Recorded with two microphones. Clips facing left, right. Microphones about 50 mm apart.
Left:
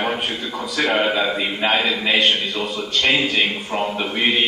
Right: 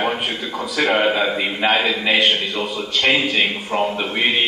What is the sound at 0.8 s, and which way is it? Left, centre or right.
Speech, centre.